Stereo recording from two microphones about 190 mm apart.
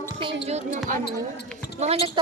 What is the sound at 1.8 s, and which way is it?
Speech, 35° right (ahead or behind).